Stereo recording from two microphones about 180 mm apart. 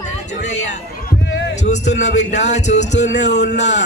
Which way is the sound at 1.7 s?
40° left (ahead or behind).